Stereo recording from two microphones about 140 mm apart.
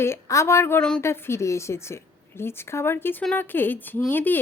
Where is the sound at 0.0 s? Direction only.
20° left (ahead or behind).